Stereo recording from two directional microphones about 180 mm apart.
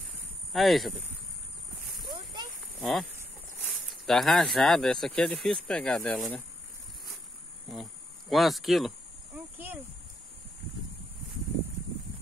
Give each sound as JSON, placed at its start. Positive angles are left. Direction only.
{"t": 0.5, "sound": "speech", "side_deg": 0}
{"t": 2.0, "sound": "a sound", "side_deg": -25}
{"t": 2.8, "sound": "speech", "side_deg": 0}
{"t": 7.7, "sound": "insect", "side_deg": 0}